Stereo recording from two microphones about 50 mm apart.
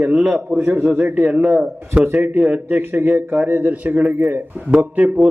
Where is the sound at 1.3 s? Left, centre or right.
Right.